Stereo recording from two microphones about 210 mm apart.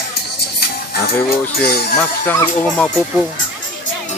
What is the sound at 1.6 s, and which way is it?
Speech, 50° left (ahead or behind).